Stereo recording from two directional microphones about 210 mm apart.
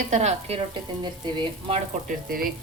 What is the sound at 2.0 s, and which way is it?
Speech, 45° right (ahead or behind).